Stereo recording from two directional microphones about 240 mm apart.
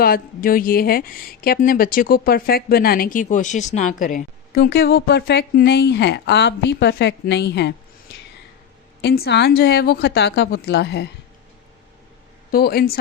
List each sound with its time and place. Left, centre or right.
0.0 s speech: left
9.0 s a woman's voice: left
12.5 s speech: left